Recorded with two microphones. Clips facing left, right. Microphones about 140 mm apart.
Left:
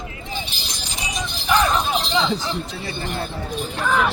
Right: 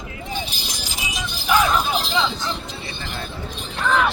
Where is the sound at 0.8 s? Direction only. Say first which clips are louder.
Left 3 dB; 5° right (ahead or behind).